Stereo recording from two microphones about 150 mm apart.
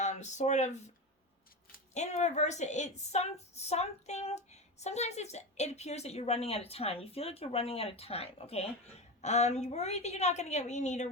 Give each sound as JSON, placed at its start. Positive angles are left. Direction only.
{"t": 0.0, "sound": "speech", "side_deg": 50}
{"t": 1.9, "sound": "a woman's voice", "side_deg": 50}